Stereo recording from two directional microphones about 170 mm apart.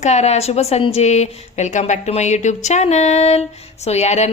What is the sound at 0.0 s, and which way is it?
A woman's voice, 40° left (ahead or behind).